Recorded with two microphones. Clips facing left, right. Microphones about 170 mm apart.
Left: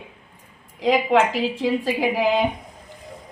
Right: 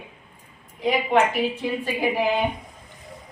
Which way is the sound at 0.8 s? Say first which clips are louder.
Left 2 dB; 90° left.